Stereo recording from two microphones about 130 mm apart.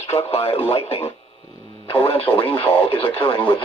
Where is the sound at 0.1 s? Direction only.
50° left (ahead or behind).